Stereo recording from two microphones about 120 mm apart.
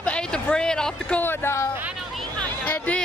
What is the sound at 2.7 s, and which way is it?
Speech, 10° left (ahead or behind).